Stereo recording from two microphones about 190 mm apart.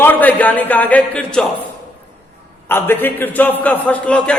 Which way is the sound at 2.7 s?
10° left (ahead or behind).